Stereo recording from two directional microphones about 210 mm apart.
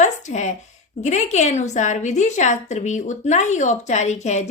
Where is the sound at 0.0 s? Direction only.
35° left (ahead or behind).